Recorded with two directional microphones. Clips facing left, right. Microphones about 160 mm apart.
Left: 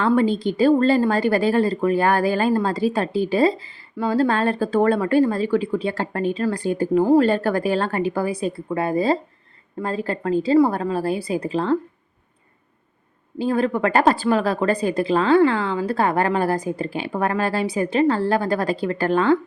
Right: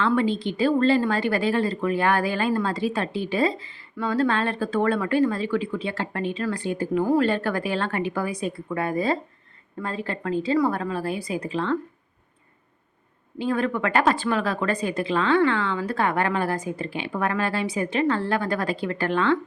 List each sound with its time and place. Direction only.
0.0 s a woman's voice: 40° left (ahead or behind)
13.4 s a woman's voice: 35° left (ahead or behind)